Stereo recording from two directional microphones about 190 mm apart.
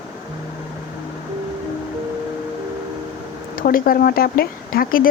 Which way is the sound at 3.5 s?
50° left (ahead or behind).